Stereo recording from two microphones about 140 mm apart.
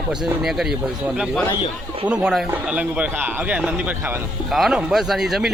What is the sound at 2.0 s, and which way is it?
Speech, 5° right (ahead or behind).